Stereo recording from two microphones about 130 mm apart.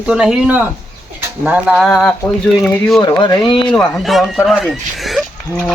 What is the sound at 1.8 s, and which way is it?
Speech, 5° left (ahead or behind).